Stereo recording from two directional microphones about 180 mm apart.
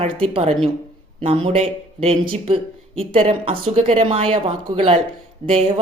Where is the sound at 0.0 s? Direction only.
35° right (ahead or behind).